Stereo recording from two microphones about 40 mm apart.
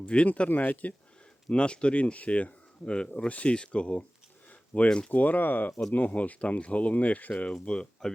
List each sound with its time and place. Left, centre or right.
0.0 s speech: left
0.3 s speech: left
1.5 s speech: left
5.1 s speech: left
7.6 s speech: left